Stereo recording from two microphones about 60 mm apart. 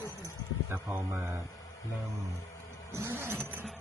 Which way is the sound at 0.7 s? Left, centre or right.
Right.